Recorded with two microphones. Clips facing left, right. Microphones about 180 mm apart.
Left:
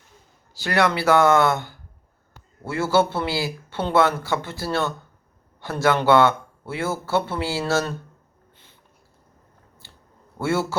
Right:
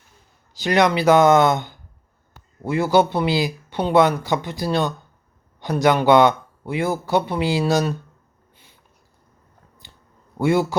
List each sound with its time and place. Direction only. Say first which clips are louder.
0.5 s speech: right 3 dB; 20° right (ahead or behind)
9.8 s a sound: even; 15° right (ahead or behind)
10.3 s a man's voice: right 5 dB; 15° right (ahead or behind)